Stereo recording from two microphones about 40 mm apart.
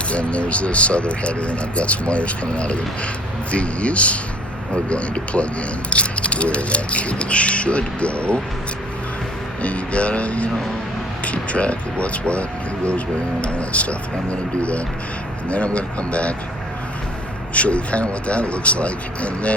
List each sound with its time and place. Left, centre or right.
0.1 s speech: left
9.6 s speech: left
17.5 s speech: left